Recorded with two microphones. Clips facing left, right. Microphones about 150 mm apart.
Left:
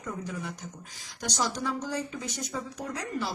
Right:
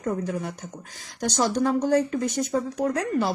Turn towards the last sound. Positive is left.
turn(degrees=-55)  # may be behind; listen again after turning